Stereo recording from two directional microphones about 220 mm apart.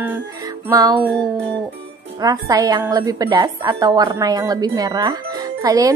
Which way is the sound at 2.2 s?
15° right (ahead or behind).